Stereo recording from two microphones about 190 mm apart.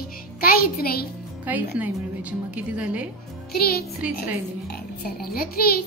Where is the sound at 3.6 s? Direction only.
55° left (ahead or behind).